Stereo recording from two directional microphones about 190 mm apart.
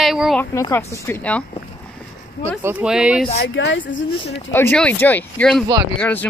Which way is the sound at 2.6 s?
10° right (ahead or behind).